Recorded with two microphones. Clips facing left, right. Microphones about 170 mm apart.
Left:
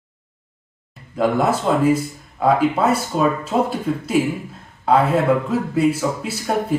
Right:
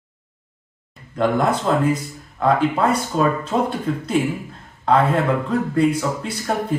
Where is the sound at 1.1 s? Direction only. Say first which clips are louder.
Left 1 dB; 5° left (ahead or behind).